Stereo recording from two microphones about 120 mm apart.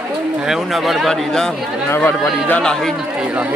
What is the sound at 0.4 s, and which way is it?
Speech, 5° right (ahead or behind).